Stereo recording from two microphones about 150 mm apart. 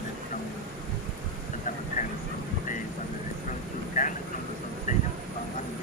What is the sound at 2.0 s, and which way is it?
Vehicle, 60° left (ahead or behind).